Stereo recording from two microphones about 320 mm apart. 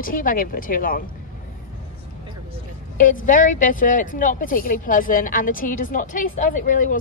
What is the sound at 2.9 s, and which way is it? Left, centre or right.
A woman's voice, left.